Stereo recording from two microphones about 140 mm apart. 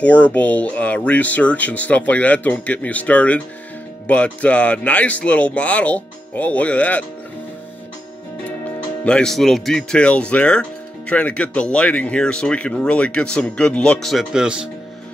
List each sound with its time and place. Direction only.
0.0 s speech: 10° left (ahead or behind)
9.0 s speech: 5° left (ahead or behind)